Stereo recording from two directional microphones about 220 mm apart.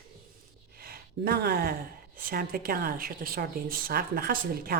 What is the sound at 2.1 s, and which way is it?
A woman's voice, 40° right (ahead or behind).